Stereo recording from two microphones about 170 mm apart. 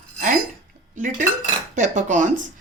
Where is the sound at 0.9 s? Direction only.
50° right (ahead or behind).